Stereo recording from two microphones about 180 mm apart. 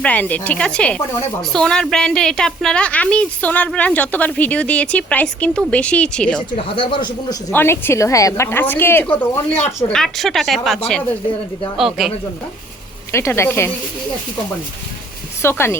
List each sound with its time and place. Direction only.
0.0 s speech: 10° left (ahead or behind)
6.6 s speech: 30° left (ahead or behind)
7.5 s speech: 15° left (ahead or behind)
11.8 s speech: centre (ahead or behind)
13.1 s speech: 15° left (ahead or behind)
15.4 s speech: 15° left (ahead or behind)